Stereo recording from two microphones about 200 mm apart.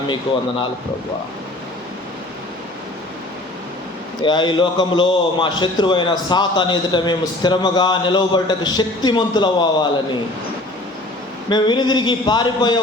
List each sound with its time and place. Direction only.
4.2 s a man's voice: 25° left (ahead or behind)
11.4 s a man's voice: 20° left (ahead or behind)